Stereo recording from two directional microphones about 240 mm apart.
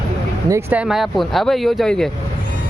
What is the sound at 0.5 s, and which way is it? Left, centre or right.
Speech, centre.